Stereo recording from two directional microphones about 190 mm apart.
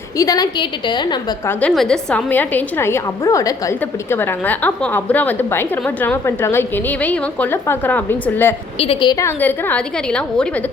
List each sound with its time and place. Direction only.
0.2 s a woman's voice: 20° left (ahead or behind)
1.5 s a woman's voice: 5° left (ahead or behind)
8.8 s a woman's voice: 30° left (ahead or behind); by 10.5 s 5° left (ahead or behind)